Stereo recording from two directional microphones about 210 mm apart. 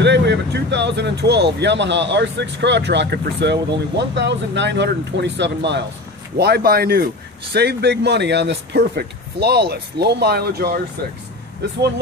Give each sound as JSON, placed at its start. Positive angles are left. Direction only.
{"t": 0.0, "sound": "speech", "side_deg": -55}